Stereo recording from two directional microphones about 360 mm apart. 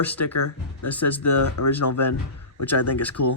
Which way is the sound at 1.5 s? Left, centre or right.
Left.